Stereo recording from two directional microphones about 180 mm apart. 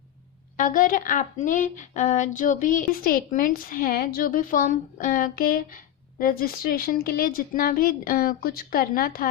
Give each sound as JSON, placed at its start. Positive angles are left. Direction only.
{"t": 0.5, "sound": "a woman's voice", "side_deg": 50}